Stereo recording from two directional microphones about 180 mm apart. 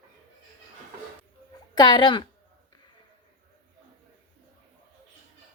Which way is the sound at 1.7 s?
25° left (ahead or behind).